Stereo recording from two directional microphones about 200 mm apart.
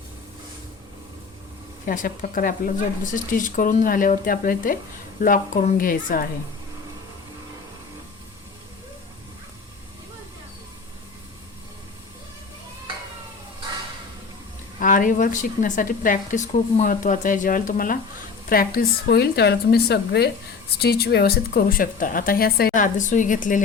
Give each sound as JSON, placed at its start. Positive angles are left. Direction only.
{"t": 1.9, "sound": "speech", "side_deg": 45}
{"t": 14.8, "sound": "a woman's voice", "side_deg": 40}